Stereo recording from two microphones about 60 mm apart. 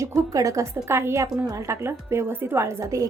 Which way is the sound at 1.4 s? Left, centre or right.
Right.